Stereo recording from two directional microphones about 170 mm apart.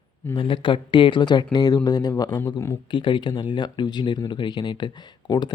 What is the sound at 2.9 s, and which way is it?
Speech, 30° left (ahead or behind).